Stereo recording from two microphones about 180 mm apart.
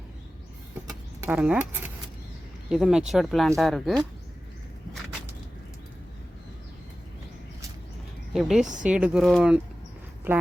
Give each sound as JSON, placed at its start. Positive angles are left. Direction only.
{"t": 0.9, "sound": "a sound", "side_deg": -20}
{"t": 1.4, "sound": "speech", "side_deg": -10}
{"t": 8.3, "sound": "a woman's voice", "side_deg": 0}
{"t": 8.6, "sound": "speech", "side_deg": -45}
{"t": 8.9, "sound": "speech", "side_deg": -5}